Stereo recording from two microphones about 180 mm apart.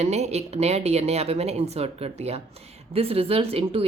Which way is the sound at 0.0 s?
35° right (ahead or behind).